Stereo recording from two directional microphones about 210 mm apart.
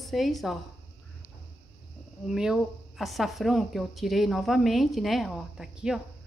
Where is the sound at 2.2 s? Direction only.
Centre (ahead or behind).